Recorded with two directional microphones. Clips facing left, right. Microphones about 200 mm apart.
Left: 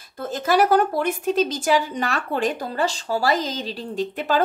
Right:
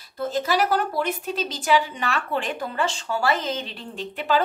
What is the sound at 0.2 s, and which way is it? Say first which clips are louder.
A woman's voice: left 3 dB; 50° left (ahead or behind).